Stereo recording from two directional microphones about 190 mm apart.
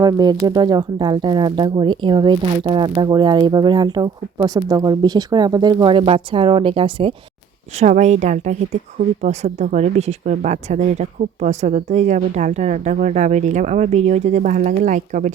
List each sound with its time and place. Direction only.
0.0 s speech: 20° right (ahead or behind)
7.8 s speech: 40° right (ahead or behind)